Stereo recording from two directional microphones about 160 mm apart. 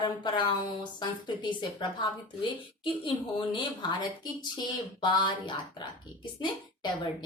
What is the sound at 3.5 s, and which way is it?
A woman's voice, 30° left (ahead or behind).